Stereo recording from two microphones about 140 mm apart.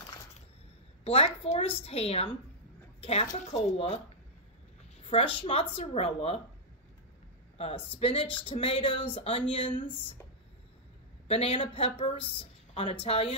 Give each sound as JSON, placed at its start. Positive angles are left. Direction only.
{"t": 1.0, "sound": "a woman's voice", "side_deg": 45}
{"t": 3.3, "sound": "speech", "side_deg": 55}
{"t": 3.7, "sound": "speech", "side_deg": 40}
{"t": 5.0, "sound": "speech", "side_deg": 40}
{"t": 7.5, "sound": "speech", "side_deg": 45}
{"t": 11.2, "sound": "a woman's voice", "side_deg": 45}